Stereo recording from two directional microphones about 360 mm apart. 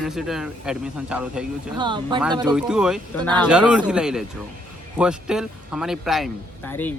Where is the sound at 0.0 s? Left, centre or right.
Centre.